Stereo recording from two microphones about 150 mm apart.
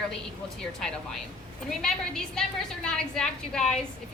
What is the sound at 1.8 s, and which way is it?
A woman's voice, 5° left (ahead or behind).